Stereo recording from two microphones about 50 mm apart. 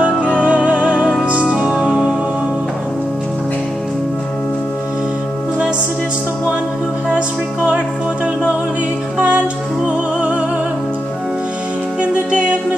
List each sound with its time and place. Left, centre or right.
0.0 s music: right
7.2 s music: right
9.8 s music: right
12.0 s music: right